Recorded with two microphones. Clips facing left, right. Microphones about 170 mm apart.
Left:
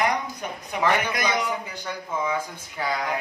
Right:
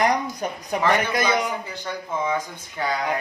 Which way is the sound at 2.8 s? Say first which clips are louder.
Right 2 dB; 5° left (ahead or behind).